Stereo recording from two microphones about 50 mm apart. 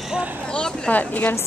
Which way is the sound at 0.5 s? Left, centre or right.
Centre.